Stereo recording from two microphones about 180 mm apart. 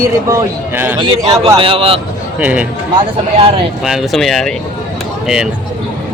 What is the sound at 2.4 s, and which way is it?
Speech, 5° right (ahead or behind).